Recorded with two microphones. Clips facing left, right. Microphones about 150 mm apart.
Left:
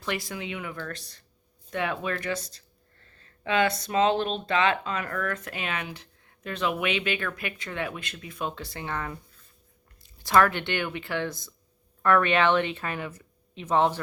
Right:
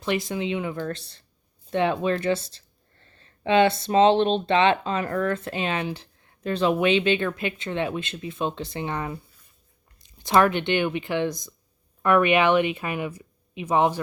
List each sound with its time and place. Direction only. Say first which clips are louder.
0.0 s speech: right 7 dB; 20° right (ahead or behind)